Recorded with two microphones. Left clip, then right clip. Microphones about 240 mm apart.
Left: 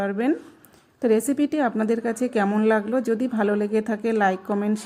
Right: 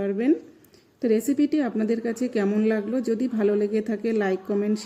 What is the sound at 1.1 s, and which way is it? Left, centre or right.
A woman's voice, centre.